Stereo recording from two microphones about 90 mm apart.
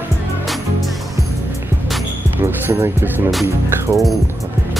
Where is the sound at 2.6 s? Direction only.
25° right (ahead or behind).